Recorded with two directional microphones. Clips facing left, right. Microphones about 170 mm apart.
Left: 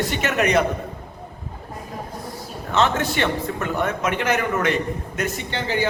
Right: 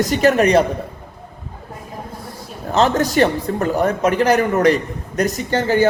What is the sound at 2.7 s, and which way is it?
Speech, 35° right (ahead or behind).